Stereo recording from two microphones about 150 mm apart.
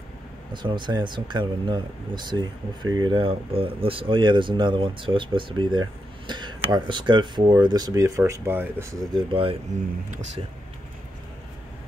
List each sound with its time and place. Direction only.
0.5 s speech: 30° right (ahead or behind); by 8.8 s 15° right (ahead or behind)
9.1 s speech: 35° right (ahead or behind)